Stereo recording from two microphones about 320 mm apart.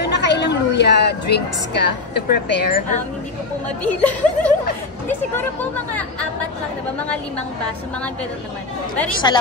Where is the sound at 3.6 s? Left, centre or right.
Centre.